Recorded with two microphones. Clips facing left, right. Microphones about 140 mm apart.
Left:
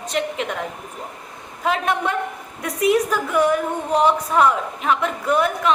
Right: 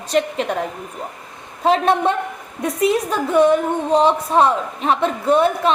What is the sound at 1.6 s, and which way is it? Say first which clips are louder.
A woman's voice: right 6 dB; 30° right (ahead or behind).